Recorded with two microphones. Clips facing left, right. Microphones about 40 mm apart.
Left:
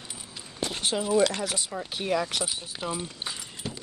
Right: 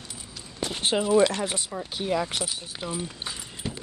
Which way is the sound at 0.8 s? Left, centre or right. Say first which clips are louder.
Right 3 dB; right.